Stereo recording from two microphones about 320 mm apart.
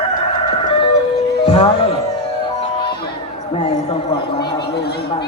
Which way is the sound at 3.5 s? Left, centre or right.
Centre.